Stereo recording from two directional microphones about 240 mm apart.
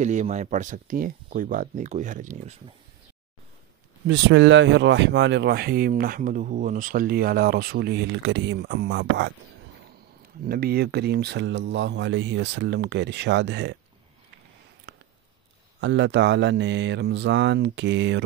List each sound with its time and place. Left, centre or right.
0.0 s speech: right
4.1 s speech: right
10.4 s speech: right
15.8 s speech: right